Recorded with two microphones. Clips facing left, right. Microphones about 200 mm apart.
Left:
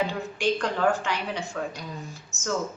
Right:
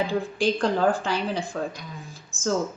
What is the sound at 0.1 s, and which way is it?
Speech, 30° right (ahead or behind).